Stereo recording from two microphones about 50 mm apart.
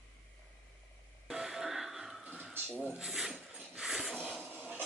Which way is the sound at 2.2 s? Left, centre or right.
Right.